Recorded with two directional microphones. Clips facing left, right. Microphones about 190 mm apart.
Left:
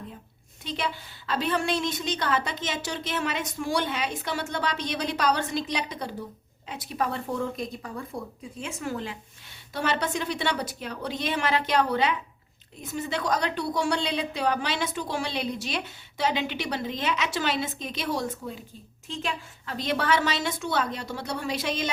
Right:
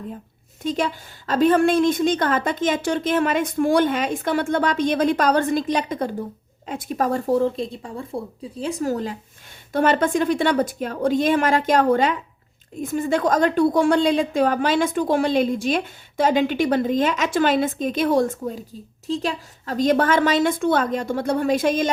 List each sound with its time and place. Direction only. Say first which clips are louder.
0.6 s a woman's voice: right 8 dB; 45° right (ahead or behind)